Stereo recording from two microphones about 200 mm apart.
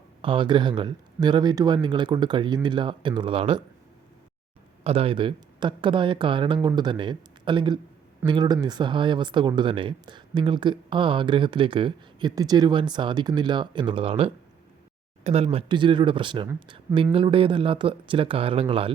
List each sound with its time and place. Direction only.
0.2 s speech: 25° right (ahead or behind)
4.8 s speech: 30° right (ahead or behind)